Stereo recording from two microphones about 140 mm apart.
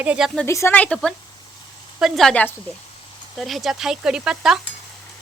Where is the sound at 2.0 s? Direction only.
Centre (ahead or behind).